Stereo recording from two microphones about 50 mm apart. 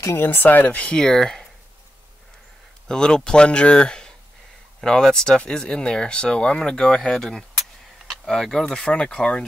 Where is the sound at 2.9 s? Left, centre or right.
Centre.